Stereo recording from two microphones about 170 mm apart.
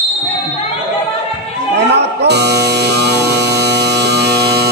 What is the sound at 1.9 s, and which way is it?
Music, 80° right.